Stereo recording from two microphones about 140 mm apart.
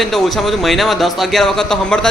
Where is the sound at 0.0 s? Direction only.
Centre (ahead or behind).